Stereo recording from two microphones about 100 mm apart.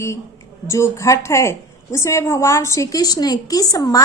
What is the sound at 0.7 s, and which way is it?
A woman's voice, 30° left (ahead or behind).